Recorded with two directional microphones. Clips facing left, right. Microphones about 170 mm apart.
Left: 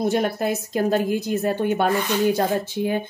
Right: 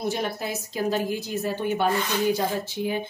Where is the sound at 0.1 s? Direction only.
55° left (ahead or behind).